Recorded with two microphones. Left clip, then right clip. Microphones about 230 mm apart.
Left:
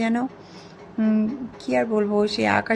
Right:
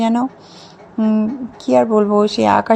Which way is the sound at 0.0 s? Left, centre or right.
Centre.